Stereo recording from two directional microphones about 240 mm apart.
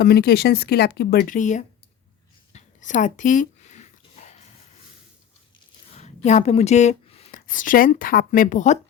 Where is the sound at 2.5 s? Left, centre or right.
Left.